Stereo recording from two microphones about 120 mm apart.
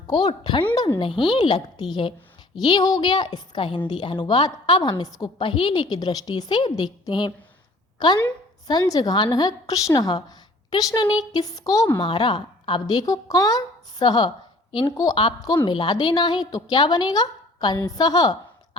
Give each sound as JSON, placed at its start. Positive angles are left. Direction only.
{"t": 0.1, "sound": "a woman's voice", "side_deg": 40}
{"t": 5.4, "sound": "a woman's voice", "side_deg": 45}